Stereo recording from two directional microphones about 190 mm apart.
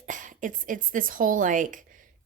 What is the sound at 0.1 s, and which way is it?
A woman's voice, 40° right (ahead or behind).